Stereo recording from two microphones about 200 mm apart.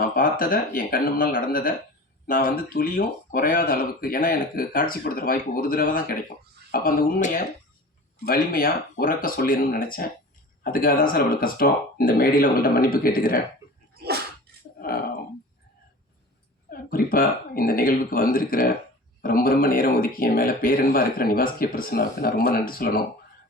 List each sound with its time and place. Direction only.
0.2 s speech: 45° left (ahead or behind)
13.9 s sneeze: 50° right (ahead or behind)
16.6 s speech: 45° left (ahead or behind)